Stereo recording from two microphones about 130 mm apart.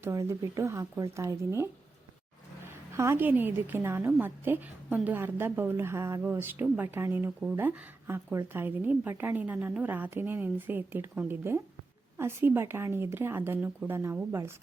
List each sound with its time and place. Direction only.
0.0 s speech: 20° right (ahead or behind)